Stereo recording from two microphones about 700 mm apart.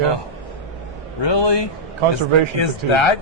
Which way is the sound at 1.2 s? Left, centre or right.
Left.